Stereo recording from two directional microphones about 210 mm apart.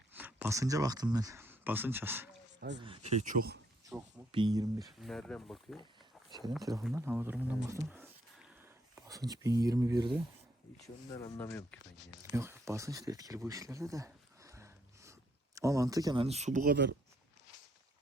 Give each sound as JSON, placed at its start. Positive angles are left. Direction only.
{"t": 0.1, "sound": "speech", "side_deg": -10}
{"t": 2.8, "sound": "speech", "side_deg": -30}
{"t": 3.9, "sound": "speech", "side_deg": -5}
{"t": 4.3, "sound": "speech", "side_deg": -20}
{"t": 4.9, "sound": "speech", "side_deg": 0}
{"t": 6.6, "sound": "speech", "side_deg": -15}
{"t": 7.8, "sound": "whispering", "side_deg": -5}
{"t": 10.8, "sound": "speech", "side_deg": 15}
{"t": 12.2, "sound": "speech", "side_deg": -15}